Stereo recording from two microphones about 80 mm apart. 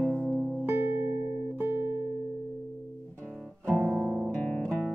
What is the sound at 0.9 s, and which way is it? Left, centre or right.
Music, right.